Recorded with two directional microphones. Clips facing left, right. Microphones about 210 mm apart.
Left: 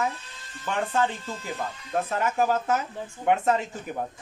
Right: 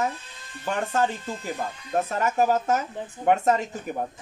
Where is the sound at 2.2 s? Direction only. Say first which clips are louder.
Right 2 dB; 40° right (ahead or behind).